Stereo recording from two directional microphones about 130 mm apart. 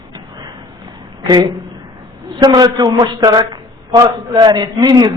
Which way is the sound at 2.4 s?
35° right (ahead or behind).